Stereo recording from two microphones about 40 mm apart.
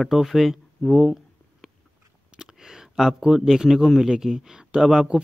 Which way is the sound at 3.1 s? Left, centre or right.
Centre.